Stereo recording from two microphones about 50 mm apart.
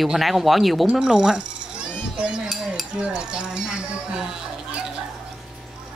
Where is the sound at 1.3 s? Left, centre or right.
Centre.